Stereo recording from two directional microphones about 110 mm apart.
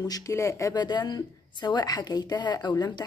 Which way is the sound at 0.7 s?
40° left (ahead or behind).